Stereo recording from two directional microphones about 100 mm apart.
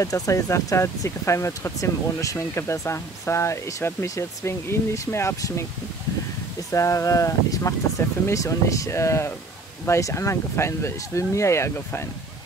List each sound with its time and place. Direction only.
0.0 s speech: 30° left (ahead or behind)
6.7 s speech: 30° left (ahead or behind)